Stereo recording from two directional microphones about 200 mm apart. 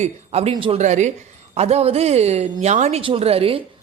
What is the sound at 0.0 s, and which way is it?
Speech, 30° right (ahead or behind).